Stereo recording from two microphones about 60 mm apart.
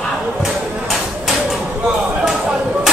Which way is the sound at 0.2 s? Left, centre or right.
Centre.